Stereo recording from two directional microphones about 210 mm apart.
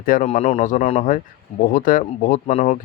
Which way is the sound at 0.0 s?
40° left (ahead or behind).